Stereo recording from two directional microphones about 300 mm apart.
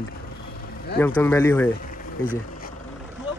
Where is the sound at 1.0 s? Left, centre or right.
Centre.